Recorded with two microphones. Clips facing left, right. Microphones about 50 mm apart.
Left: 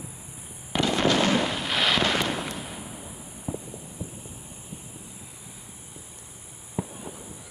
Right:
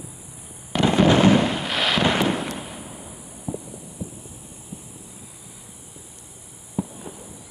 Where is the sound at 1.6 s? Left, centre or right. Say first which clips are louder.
Right 2 dB; centre.